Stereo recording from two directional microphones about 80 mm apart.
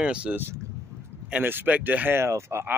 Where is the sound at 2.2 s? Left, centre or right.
Right.